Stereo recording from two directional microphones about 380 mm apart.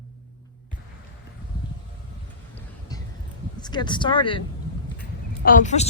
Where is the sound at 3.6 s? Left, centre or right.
Centre.